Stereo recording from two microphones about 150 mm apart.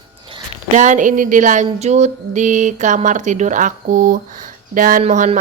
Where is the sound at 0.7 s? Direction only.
60° right (ahead or behind).